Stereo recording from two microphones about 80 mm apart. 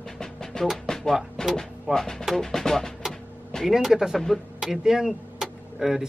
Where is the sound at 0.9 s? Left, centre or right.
Centre.